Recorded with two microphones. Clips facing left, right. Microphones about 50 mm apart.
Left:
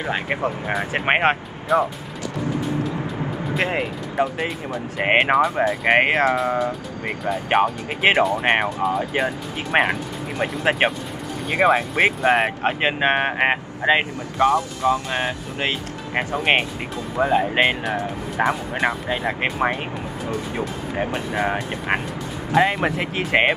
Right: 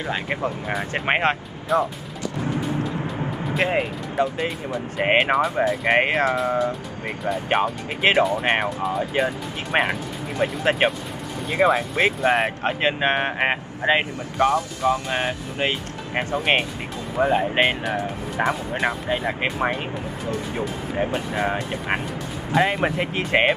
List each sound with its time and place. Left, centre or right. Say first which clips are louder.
0.0 s speech: left 2 dB; centre
3.4 s speech: right 1 dB; centre
5.9 s speech: left 3 dB; left
6.1 s speech: left 2 dB; centre
7.5 s speech: left 5 dB; centre
16.2 s speech: left 1 dB; centre
20.9 s speech: even; centre